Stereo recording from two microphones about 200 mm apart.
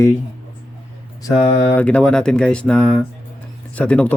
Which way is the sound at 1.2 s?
20° left (ahead or behind).